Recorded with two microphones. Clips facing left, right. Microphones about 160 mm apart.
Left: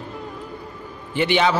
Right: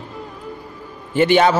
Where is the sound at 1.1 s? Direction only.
45° right (ahead or behind).